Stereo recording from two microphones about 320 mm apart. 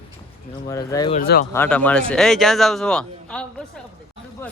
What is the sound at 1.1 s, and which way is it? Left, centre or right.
Speech, left.